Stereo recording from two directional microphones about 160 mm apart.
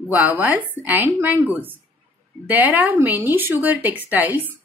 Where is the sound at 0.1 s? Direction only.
10° right (ahead or behind).